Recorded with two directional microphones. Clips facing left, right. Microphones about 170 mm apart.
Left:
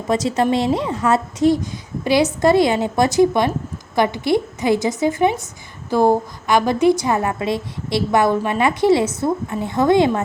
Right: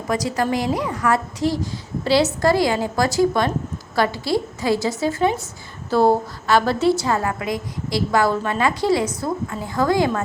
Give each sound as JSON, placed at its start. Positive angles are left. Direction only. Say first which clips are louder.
{"t": 0.1, "sound": "a woman's voice", "louder": "left 4 dB", "side_deg": 25}